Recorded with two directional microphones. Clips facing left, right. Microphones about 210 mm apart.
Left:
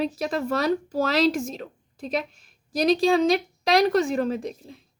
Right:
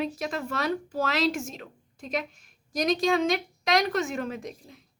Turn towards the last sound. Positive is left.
turn(degrees=30)  # may be behind; listen again after turning